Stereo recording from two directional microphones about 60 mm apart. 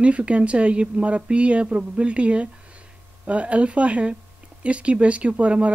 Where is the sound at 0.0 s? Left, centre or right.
Right.